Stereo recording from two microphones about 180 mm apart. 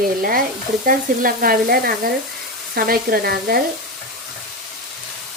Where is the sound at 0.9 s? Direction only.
55° right (ahead or behind).